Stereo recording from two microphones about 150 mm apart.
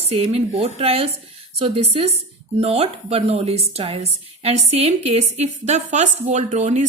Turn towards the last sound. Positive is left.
turn(degrees=-50)  # may be behind; listen again after turning